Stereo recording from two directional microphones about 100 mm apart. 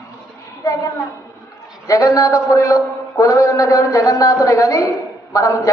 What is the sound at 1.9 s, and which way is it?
A man's voice, 35° left (ahead or behind).